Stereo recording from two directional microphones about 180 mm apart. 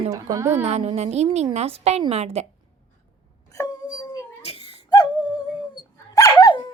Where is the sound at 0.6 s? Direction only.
40° right (ahead or behind).